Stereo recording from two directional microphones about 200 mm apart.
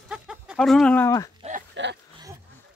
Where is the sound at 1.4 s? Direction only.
30° right (ahead or behind).